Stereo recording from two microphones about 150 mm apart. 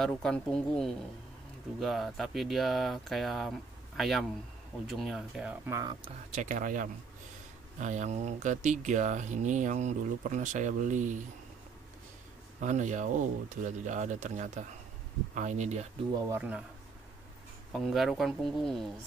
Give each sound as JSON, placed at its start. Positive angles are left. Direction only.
{"t": 0.2, "sound": "speech", "side_deg": 5}
{"t": 5.8, "sound": "speech", "side_deg": -30}
{"t": 6.3, "sound": "speech", "side_deg": -60}
{"t": 12.5, "sound": "speech", "side_deg": -55}
{"t": 16.3, "sound": "speech", "side_deg": -10}
{"t": 17.7, "sound": "speech", "side_deg": 0}